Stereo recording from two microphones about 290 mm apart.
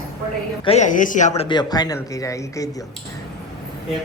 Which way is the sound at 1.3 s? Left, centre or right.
Centre.